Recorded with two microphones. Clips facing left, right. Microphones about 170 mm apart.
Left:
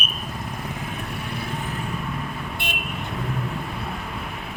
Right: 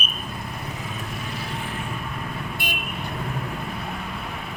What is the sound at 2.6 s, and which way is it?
Vehicle, 25° left (ahead or behind).